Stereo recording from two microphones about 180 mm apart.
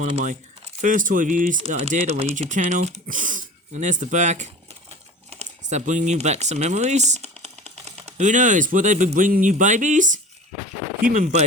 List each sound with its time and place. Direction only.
0.0 s speech: 40° right (ahead or behind)
1.5 s speech: 35° right (ahead or behind)